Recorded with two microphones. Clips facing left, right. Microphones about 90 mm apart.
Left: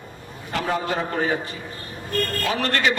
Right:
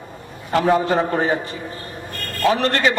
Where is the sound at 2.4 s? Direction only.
30° right (ahead or behind).